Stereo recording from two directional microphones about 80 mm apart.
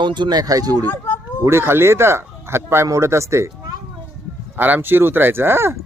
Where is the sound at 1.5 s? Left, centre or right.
Right.